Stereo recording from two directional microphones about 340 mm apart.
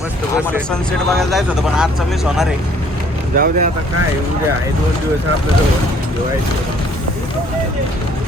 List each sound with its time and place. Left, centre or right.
0.3 s speech: centre
3.3 s speech: right